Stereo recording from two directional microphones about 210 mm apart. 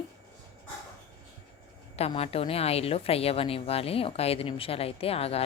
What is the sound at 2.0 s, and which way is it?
A woman's voice, 30° left (ahead or behind).